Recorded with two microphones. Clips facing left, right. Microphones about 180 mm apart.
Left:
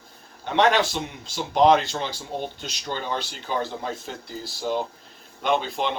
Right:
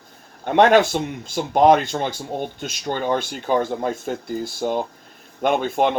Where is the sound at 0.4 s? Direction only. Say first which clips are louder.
Right 6 dB; 50° right (ahead or behind).